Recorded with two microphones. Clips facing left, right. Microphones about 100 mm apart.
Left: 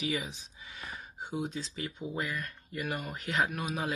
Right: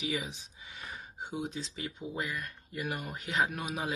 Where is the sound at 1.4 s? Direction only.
15° right (ahead or behind).